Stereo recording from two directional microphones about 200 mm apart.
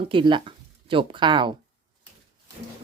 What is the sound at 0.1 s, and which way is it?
Speech, 25° right (ahead or behind).